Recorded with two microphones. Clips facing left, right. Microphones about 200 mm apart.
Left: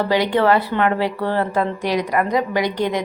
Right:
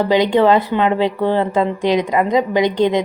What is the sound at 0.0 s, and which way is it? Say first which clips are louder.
A woman's voice: right 4 dB; 20° right (ahead or behind).